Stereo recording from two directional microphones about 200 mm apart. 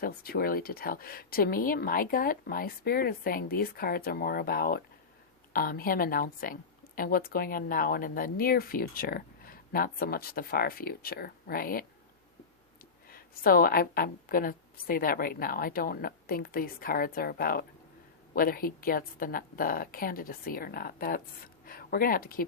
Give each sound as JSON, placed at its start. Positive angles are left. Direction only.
{"t": 0.0, "sound": "a woman's voice", "side_deg": 50}
{"t": 13.1, "sound": "a woman's voice", "side_deg": 45}